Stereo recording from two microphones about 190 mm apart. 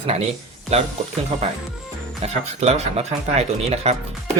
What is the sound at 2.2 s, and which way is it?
Speech, 35° right (ahead or behind).